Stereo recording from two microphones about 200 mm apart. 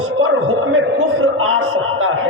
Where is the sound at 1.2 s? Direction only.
90° right.